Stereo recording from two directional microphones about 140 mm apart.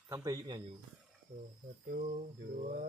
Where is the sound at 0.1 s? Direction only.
25° right (ahead or behind).